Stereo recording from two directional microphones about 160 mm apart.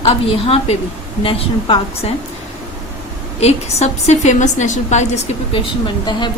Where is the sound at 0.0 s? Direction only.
35° left (ahead or behind).